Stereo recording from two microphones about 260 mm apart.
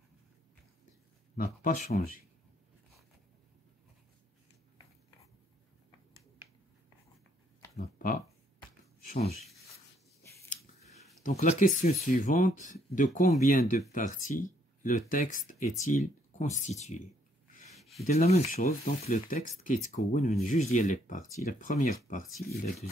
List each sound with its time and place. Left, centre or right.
1.3 s speech: left
7.7 s pig: left
9.0 s speech: left
11.2 s speech: left
17.7 s a sound: centre
18.0 s speech: left